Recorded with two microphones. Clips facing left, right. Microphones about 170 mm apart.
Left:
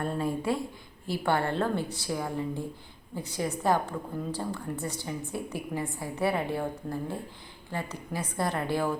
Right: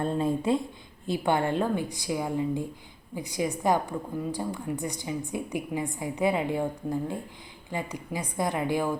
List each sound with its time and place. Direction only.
0.0 s a woman's voice: 20° right (ahead or behind)